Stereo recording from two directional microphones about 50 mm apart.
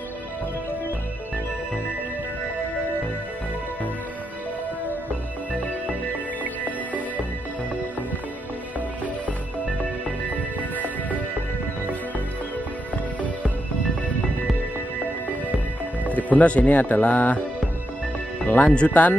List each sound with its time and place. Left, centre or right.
16.1 s speech: left
18.4 s music: left
18.7 s speech: left